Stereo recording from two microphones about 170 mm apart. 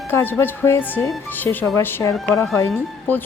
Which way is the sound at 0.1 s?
10° left (ahead or behind).